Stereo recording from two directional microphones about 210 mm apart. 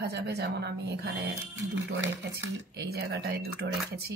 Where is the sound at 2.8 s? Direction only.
50° right (ahead or behind).